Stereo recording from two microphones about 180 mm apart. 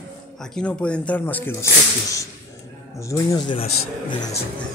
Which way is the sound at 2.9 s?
20° left (ahead or behind).